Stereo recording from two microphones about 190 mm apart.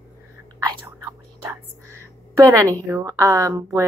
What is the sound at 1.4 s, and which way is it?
Whispering, 15° right (ahead or behind).